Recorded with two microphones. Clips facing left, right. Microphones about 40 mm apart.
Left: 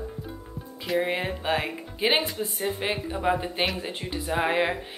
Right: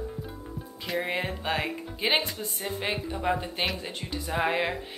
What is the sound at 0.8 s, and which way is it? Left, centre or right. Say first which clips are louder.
Speech: left 4 dB; centre.